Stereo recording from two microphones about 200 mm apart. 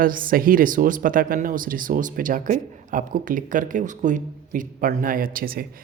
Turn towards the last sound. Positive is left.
turn(degrees=-45)  # may be behind; listen again after turning